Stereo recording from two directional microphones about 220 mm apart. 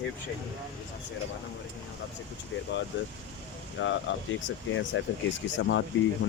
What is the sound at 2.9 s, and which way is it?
Speech, 55° left (ahead or behind).